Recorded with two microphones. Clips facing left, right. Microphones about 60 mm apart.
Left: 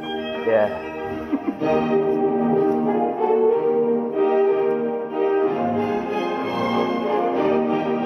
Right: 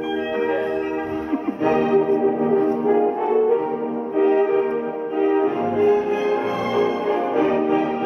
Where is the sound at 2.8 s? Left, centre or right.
Centre.